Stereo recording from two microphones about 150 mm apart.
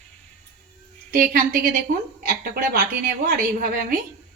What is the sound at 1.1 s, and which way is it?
A woman's voice, 85° right.